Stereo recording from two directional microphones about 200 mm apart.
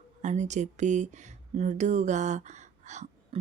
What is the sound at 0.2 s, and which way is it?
Speech, 35° right (ahead or behind).